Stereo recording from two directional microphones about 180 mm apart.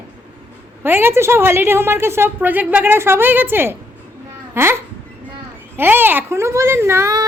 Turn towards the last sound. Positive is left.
turn(degrees=-20)  # may be behind; listen again after turning